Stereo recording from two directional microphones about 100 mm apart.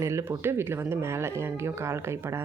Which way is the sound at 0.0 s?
30° right (ahead or behind).